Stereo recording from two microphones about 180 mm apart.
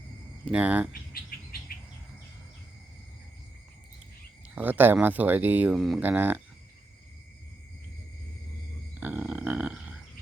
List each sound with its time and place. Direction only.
0.5 s speech: 5° right (ahead or behind)
1.3 s bird: 50° left (ahead or behind)
4.5 s speech: 10° right (ahead or behind)
9.0 s a sound: 10° right (ahead or behind)